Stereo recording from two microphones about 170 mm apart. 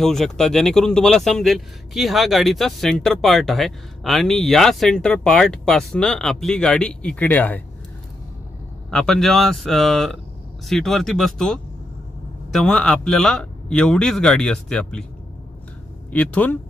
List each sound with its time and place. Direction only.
0.0 s speech: centre (ahead or behind)
8.9 s speech: 5° left (ahead or behind)
16.1 s speech: 10° left (ahead or behind)